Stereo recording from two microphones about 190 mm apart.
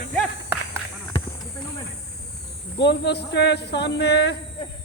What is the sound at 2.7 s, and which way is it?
Speech, 65° left (ahead or behind).